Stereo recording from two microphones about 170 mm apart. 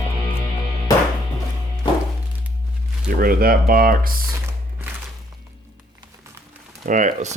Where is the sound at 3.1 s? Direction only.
60° right (ahead or behind).